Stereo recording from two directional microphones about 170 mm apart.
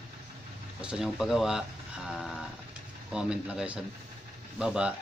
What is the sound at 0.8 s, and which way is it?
Speech, 5° right (ahead or behind).